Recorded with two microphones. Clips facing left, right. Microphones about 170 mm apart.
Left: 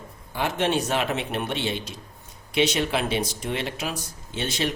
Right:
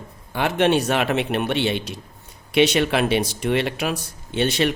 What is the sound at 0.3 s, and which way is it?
A man's voice, 65° right (ahead or behind).